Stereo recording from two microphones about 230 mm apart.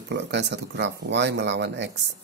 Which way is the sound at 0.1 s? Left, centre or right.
Right.